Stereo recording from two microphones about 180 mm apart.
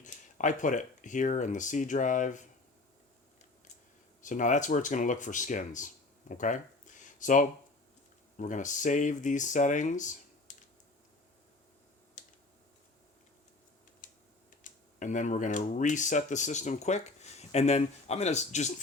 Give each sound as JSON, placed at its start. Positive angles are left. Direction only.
{"t": 0.0, "sound": "speech", "side_deg": 45}
{"t": 4.2, "sound": "speech", "side_deg": 45}
{"t": 12.2, "sound": "typing", "side_deg": 45}
{"t": 14.0, "sound": "typing", "side_deg": 45}
{"t": 14.6, "sound": "speech", "side_deg": 45}